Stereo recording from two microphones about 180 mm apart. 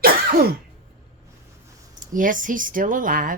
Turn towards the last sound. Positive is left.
turn(degrees=-50)  # may be behind; listen again after turning